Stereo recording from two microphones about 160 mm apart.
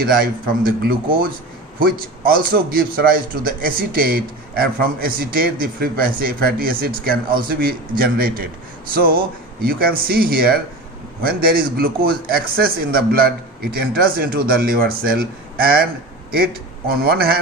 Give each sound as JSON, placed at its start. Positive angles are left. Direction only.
{"t": 0.0, "sound": "a man's voice", "side_deg": -65}